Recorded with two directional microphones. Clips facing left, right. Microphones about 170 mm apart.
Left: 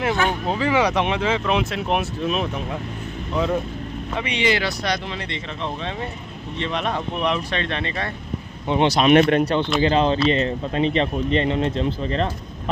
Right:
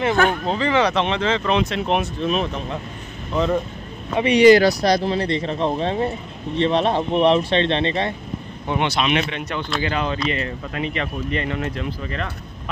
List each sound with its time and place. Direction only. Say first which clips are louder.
0.1 s speech: right 5 dB; 50° right (ahead or behind)
0.5 s speech: right 1 dB; 5° left (ahead or behind)
4.2 s speech: right 11 dB; 40° right (ahead or behind)
8.7 s speech: left 6 dB; 40° left (ahead or behind)
9.4 s speech: left 6 dB; 30° left (ahead or behind)